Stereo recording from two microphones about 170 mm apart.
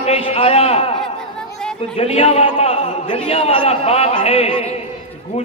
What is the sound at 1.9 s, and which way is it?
A man's voice, 35° left (ahead or behind).